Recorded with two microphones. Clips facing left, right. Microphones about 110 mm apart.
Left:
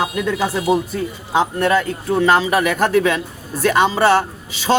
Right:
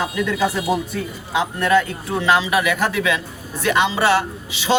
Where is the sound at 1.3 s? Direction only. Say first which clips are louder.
Left 1 dB; 35° left (ahead or behind).